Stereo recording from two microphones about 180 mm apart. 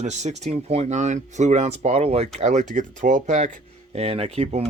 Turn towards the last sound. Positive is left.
turn(degrees=-35)  # may be behind; listen again after turning